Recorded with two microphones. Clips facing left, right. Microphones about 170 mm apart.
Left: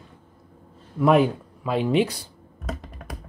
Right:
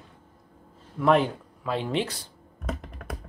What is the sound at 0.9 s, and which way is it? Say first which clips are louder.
Speech: left 3 dB; 10° left (ahead or behind).